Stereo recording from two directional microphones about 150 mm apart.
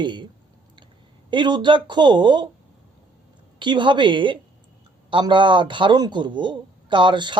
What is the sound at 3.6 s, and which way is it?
A man's voice, 30° right (ahead or behind).